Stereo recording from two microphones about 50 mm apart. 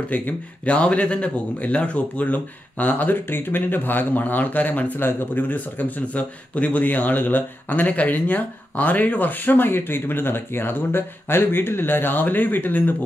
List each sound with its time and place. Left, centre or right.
0.1 s speech: left